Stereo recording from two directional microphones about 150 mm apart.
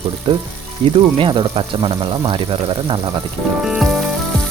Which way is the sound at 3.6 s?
5° right (ahead or behind).